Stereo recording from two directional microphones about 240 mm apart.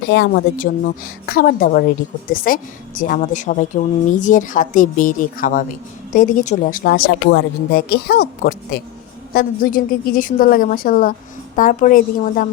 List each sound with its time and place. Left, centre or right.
0.1 s a woman's voice: left